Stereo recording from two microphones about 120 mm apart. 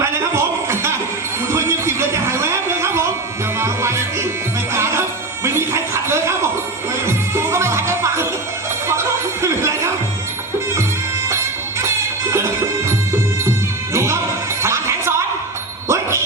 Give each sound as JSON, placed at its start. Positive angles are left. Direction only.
{"t": 0.0, "sound": "music", "side_deg": -25}
{"t": 8.9, "sound": "a sound", "side_deg": -20}
{"t": 11.8, "sound": "music", "side_deg": -25}
{"t": 13.9, "sound": "music", "side_deg": -25}